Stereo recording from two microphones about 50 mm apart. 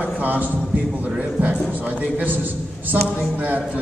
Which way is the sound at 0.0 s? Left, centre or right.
Right.